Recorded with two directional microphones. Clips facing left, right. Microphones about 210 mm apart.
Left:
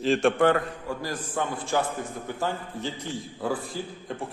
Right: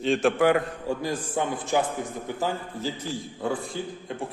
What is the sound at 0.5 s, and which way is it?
A man's voice, 20° right (ahead or behind).